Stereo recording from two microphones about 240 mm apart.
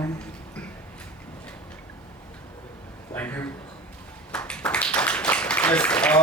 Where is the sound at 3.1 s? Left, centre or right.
Centre.